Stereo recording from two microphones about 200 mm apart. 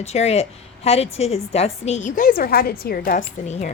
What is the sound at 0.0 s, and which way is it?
A woman's voice, 30° left (ahead or behind).